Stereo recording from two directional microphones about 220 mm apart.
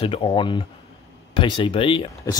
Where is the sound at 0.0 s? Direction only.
25° left (ahead or behind).